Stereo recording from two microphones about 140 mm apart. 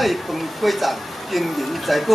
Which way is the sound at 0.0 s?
Centre (ahead or behind).